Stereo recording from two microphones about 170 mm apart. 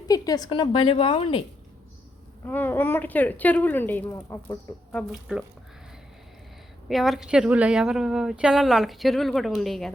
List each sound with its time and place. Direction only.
0.1 s a woman's voice: 20° left (ahead or behind)
2.5 s a woman's voice: 10° left (ahead or behind)
6.8 s speech: centre (ahead or behind)